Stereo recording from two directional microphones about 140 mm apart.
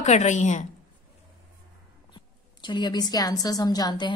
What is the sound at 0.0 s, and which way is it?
Speech, 55° left (ahead or behind).